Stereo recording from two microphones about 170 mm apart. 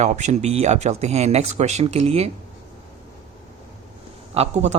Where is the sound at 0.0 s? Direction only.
45° right (ahead or behind).